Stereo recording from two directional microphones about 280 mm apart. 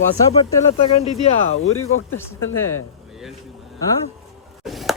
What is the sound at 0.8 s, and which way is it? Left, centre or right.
Speech, left.